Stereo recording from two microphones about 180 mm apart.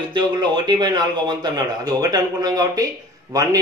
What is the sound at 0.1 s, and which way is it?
A man's voice, 25° right (ahead or behind).